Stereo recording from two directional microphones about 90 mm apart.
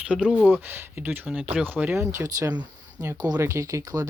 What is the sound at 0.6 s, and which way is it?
Speech, 25° right (ahead or behind).